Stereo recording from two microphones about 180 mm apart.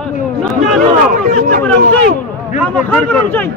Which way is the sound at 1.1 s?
50° right (ahead or behind).